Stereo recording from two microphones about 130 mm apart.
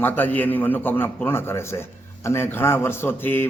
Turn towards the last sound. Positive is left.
turn(degrees=15)  # may be behind; listen again after turning